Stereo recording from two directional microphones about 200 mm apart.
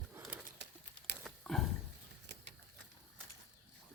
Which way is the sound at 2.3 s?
60° right (ahead or behind).